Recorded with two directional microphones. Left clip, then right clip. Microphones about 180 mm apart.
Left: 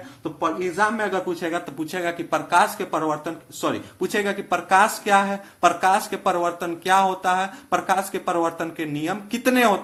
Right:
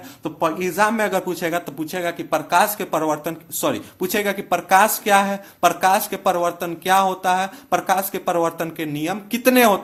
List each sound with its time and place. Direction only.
0.2 s a man's voice: 40° right (ahead or behind); by 9.8 s 25° right (ahead or behind)